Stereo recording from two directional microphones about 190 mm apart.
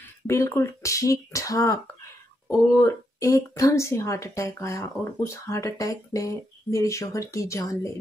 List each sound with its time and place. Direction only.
0.3 s a woman's voice: 15° left (ahead or behind)